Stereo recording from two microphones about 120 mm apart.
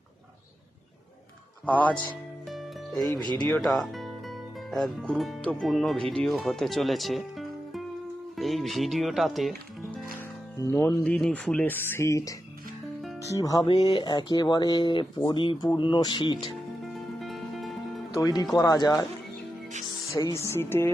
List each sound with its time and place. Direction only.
1.6 s speech: 10° left (ahead or behind)
2.5 s music: centre (ahead or behind)
3.4 s speech: 5° left (ahead or behind)
10.8 s speech: 5° left (ahead or behind); by 12.3 s 25° left (ahead or behind)
13.3 s speech: 30° left (ahead or behind)
16.8 s music: centre (ahead or behind)
18.2 s speech: 30° left (ahead or behind)
20.1 s speech: 25° left (ahead or behind)